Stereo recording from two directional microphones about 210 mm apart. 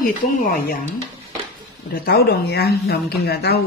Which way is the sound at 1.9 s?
45° left (ahead or behind).